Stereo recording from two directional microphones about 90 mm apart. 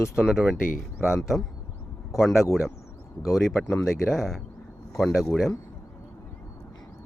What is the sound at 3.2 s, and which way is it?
Speech, 35° left (ahead or behind).